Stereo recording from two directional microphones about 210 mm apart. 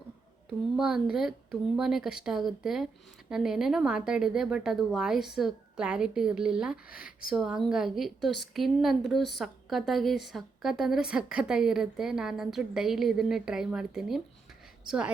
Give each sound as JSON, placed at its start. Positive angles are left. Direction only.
{"t": 0.8, "sound": "a woman's voice", "side_deg": 0}
{"t": 6.9, "sound": "speech", "side_deg": 45}
{"t": 7.3, "sound": "a woman's voice", "side_deg": -5}